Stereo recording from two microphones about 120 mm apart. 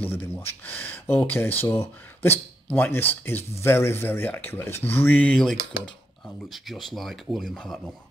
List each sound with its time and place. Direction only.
0.0 s speech: 15° left (ahead or behind); by 7.9 s centre (ahead or behind)